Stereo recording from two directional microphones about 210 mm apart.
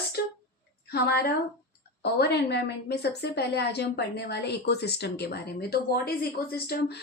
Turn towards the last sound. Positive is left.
turn(degrees=50)  # may be behind; listen again after turning